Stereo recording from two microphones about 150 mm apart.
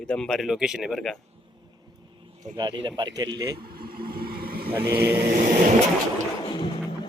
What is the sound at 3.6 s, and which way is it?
Vehicle, 85° right.